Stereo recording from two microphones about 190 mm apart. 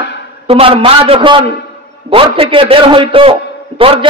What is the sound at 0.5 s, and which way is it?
A man's voice, 30° right (ahead or behind).